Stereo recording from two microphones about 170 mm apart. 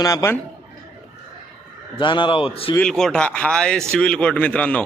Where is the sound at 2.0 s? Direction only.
30° left (ahead or behind).